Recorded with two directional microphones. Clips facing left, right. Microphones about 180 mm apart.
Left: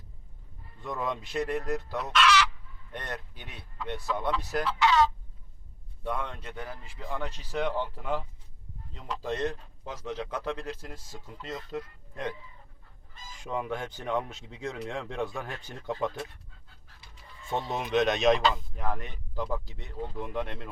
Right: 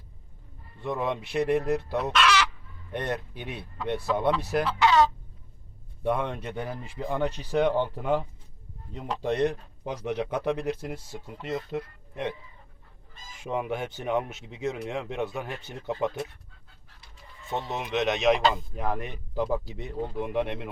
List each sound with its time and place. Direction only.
0.8 s speech: 20° right (ahead or behind)
6.0 s speech: 25° right (ahead or behind)
9.4 s speech: 15° right (ahead or behind)
11.3 s speech: 25° right (ahead or behind)
13.4 s speech: 20° right (ahead or behind)
17.5 s speech: centre (ahead or behind)
18.5 s speech: 20° right (ahead or behind)